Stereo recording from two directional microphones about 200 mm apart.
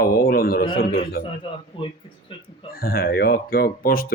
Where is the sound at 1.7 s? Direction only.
25° left (ahead or behind).